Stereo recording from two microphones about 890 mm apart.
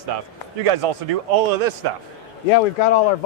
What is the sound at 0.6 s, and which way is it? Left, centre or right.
Speech, right.